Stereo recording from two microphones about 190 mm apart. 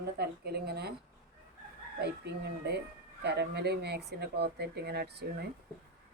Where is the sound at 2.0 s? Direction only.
60° right (ahead or behind).